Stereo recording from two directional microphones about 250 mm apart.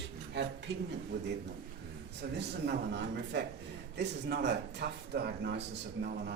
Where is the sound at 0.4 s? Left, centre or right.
Right.